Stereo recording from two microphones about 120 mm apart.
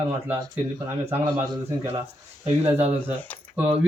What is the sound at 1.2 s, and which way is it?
Speech, 35° right (ahead or behind).